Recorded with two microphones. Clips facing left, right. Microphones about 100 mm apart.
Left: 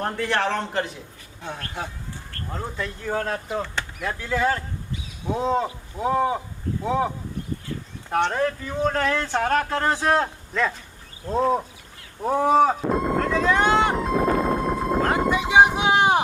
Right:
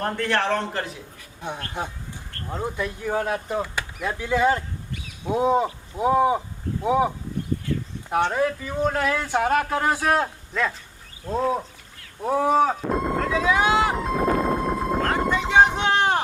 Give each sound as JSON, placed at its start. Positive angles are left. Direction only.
{"t": 0.0, "sound": "a man's voice", "side_deg": 5}
{"t": 1.4, "sound": "speech", "side_deg": -20}
{"t": 4.9, "sound": "a sound", "side_deg": -60}
{"t": 5.2, "sound": "speech", "side_deg": -15}
{"t": 8.1, "sound": "a man's voice", "side_deg": -5}
{"t": 12.9, "sound": "music", "side_deg": 0}